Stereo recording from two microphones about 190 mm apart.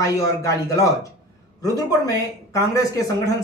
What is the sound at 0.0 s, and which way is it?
A man's voice, 15° left (ahead or behind).